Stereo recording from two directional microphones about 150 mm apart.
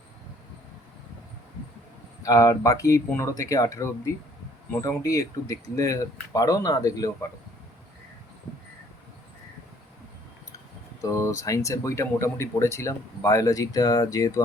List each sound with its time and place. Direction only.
2.2 s speech: 20° left (ahead or behind)
11.0 s speech: 20° left (ahead or behind)